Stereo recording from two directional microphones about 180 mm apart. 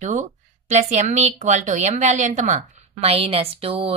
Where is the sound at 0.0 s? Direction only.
40° right (ahead or behind).